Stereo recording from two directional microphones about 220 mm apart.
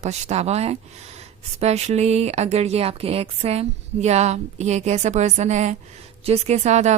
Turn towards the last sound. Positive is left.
turn(degrees=-30)  # may be behind; listen again after turning